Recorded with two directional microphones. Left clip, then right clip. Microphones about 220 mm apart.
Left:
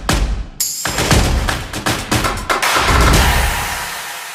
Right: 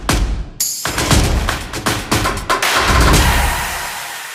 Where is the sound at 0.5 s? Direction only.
Centre (ahead or behind).